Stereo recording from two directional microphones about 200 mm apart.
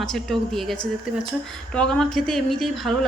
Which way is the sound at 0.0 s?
Centre (ahead or behind).